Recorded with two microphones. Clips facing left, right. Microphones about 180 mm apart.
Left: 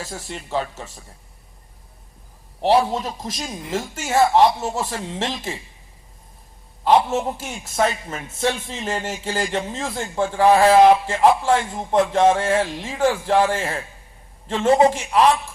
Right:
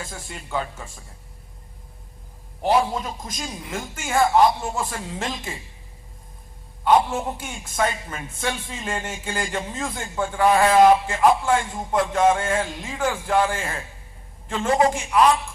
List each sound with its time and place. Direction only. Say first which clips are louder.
0.3 s a man's voice: left 3 dB; 25° left (ahead or behind)
2.6 s a man's voice: left 3 dB; 30° left (ahead or behind)
6.8 s a man's voice: left 2 dB; 25° left (ahead or behind)